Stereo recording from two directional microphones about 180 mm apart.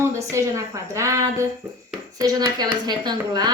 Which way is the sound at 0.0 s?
15° right (ahead or behind).